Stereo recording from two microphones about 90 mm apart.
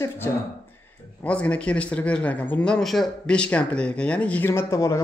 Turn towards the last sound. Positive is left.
turn(degrees=35)  # may be behind; listen again after turning